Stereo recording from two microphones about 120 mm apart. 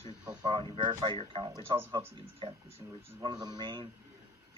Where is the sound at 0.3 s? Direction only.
40° right (ahead or behind).